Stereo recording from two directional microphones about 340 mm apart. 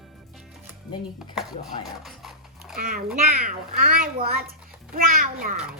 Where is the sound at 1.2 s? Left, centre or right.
Centre.